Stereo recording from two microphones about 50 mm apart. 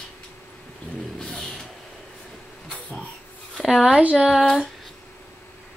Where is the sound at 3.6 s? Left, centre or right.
Centre.